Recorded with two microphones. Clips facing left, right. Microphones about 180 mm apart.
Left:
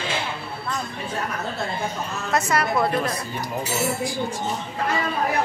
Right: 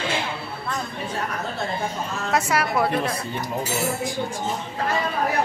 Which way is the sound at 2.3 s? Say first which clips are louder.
Even; 10° right (ahead or behind).